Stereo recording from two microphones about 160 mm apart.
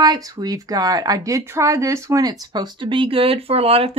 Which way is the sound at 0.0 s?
25° right (ahead or behind).